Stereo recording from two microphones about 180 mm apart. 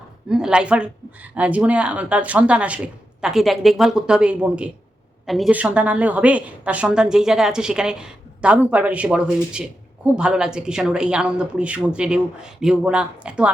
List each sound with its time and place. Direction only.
0.3 s a woman's voice: 5° right (ahead or behind)